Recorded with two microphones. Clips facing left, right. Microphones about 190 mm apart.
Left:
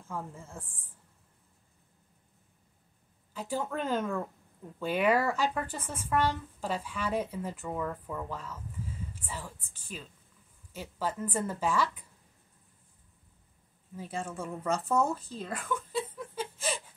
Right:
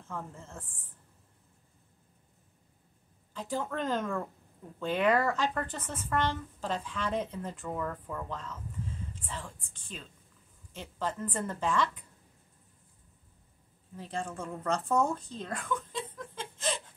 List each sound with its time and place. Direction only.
0.1 s speech: 10° left (ahead or behind)
3.3 s speech: 10° left (ahead or behind)
13.9 s a woman's voice: 5° left (ahead or behind)